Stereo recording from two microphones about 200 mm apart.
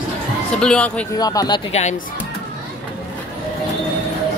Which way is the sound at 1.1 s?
20° left (ahead or behind).